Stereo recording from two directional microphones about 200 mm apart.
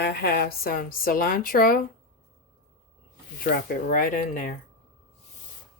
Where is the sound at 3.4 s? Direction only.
45° left (ahead or behind).